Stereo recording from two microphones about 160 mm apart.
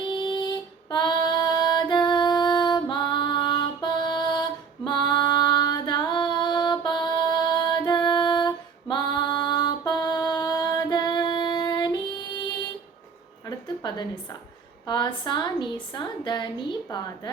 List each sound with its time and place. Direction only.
0.1 s female singing: 30° left (ahead or behind)
13.8 s a sound: 25° left (ahead or behind)
14.8 s a woman's voice: 25° left (ahead or behind)